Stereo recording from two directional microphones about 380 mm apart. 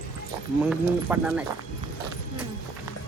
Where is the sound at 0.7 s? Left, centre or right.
Centre.